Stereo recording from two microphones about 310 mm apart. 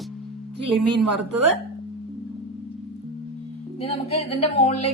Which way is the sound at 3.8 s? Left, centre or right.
Centre.